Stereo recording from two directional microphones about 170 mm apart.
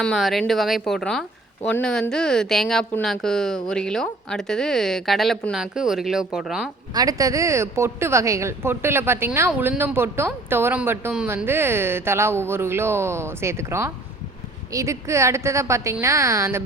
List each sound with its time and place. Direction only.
0.0 s a woman's voice: centre (ahead or behind)
6.9 s speech: 20° right (ahead or behind)